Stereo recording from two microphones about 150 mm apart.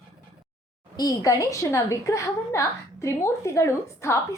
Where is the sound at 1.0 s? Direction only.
25° left (ahead or behind).